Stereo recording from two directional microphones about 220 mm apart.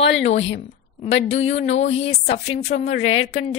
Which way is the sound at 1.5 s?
30° left (ahead or behind).